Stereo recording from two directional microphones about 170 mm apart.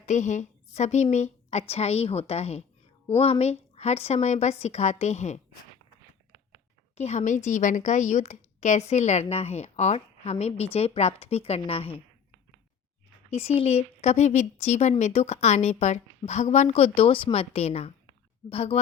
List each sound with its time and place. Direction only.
0.0 s a woman's voice: 45° left (ahead or behind)
6.9 s speech: 40° left (ahead or behind)
13.3 s speech: 35° left (ahead or behind)